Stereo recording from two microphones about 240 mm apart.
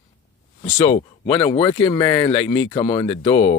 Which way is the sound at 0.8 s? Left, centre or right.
Left.